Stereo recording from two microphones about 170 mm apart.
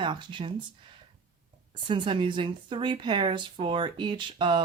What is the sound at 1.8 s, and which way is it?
Speech, 30° right (ahead or behind).